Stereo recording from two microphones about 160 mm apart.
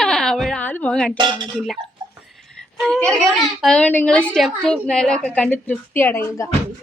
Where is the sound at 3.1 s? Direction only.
5° left (ahead or behind).